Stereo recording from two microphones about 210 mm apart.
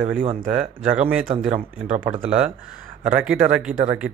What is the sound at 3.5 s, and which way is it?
Speech, 5° right (ahead or behind).